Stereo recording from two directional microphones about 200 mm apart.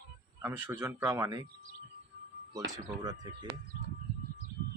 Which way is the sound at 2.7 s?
20° right (ahead or behind).